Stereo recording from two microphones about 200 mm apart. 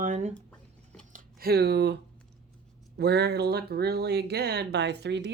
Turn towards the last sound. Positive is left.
turn(degrees=-60)  # may be behind; listen again after turning